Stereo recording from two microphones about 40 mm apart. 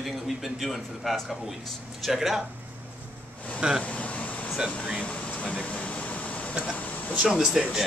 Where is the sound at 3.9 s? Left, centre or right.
Left.